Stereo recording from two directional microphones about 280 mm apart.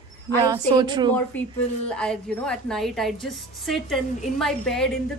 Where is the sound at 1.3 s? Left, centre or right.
Centre.